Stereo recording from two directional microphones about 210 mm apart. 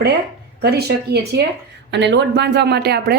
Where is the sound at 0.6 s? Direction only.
50° right (ahead or behind).